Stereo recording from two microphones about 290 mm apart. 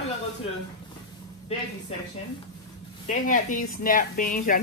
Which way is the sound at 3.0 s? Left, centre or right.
Left.